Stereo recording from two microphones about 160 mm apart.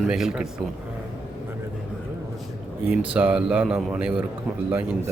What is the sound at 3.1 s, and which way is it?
A man's voice, 5° right (ahead or behind).